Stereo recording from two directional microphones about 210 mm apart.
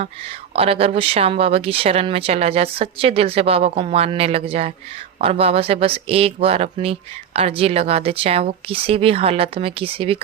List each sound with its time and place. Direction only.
0.0 s speech: 30° right (ahead or behind)